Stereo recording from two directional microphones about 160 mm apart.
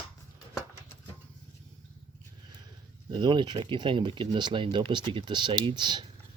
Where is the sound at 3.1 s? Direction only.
30° right (ahead or behind).